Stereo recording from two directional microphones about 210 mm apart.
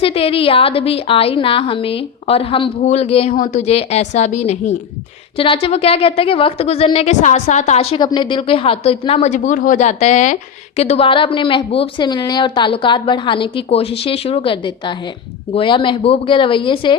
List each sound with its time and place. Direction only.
0.0 s a woman's voice: 25° left (ahead or behind)